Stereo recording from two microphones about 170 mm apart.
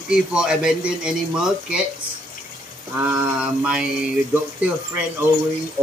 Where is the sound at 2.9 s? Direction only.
10° right (ahead or behind).